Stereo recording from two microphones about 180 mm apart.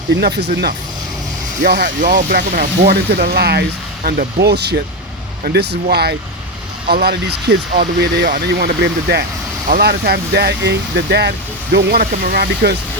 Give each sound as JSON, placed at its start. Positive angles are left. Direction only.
{"t": 0.1, "sound": "speech", "side_deg": -70}
{"t": 2.5, "sound": "speech", "side_deg": -60}